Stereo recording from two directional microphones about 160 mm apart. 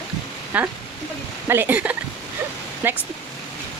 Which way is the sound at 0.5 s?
10° right (ahead or behind).